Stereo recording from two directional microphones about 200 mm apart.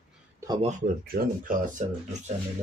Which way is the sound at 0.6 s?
35° right (ahead or behind).